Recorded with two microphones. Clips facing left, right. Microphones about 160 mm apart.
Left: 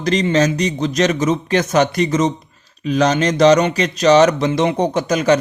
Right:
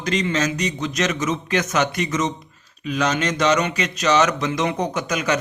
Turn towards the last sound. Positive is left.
turn(degrees=35)  # may be behind; listen again after turning